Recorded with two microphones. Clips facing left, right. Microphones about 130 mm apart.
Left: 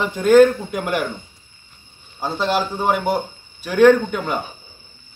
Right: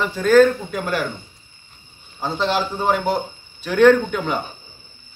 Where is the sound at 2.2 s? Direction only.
10° left (ahead or behind).